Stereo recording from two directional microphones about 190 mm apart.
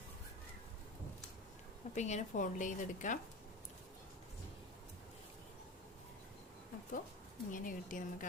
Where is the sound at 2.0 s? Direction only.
40° left (ahead or behind).